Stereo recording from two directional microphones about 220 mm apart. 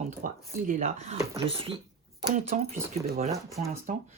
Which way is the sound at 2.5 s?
35° right (ahead or behind).